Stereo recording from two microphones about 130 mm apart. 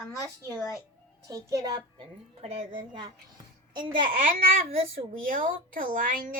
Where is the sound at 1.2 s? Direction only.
25° right (ahead or behind).